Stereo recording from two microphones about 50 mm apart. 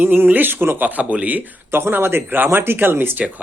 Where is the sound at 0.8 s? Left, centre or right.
Right.